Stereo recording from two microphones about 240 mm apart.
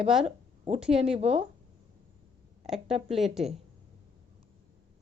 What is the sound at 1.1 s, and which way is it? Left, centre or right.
Speech, right.